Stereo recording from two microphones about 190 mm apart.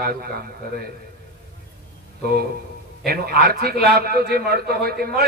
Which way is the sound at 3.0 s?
55° right (ahead or behind).